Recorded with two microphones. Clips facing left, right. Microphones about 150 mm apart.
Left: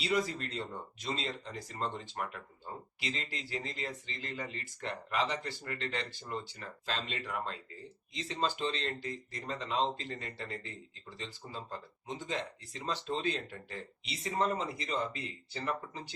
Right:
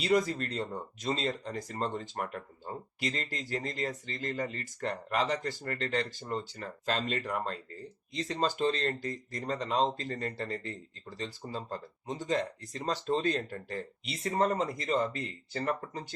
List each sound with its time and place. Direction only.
0.0 s speech: 45° right (ahead or behind)